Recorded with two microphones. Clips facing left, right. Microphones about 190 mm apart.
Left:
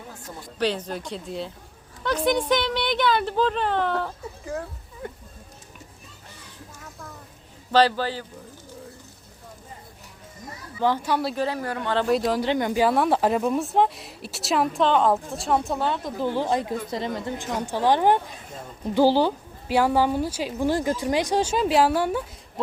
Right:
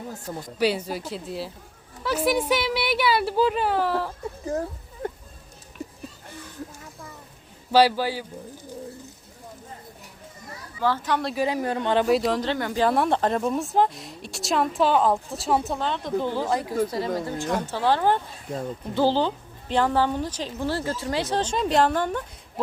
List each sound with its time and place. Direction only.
0.3 s speech: 40° right (ahead or behind)
0.6 s speech: 10° right (ahead or behind)
7.7 s speech: 10° right (ahead or behind)
10.8 s a woman's voice: 15° left (ahead or behind)
11.3 s speech: 15° right (ahead or behind)
12.0 s speech: centre (ahead or behind)
12.4 s a woman's voice: 15° left (ahead or behind)
12.9 s a woman's voice: 5° left (ahead or behind)
16.4 s a woman's voice: 20° left (ahead or behind)